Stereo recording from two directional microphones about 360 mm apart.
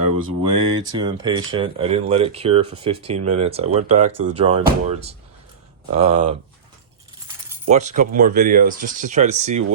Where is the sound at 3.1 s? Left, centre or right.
Right.